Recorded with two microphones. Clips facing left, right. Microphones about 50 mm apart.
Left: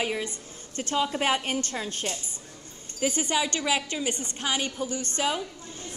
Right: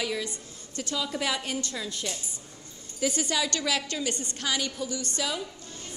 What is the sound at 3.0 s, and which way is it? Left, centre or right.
A woman's voice, left.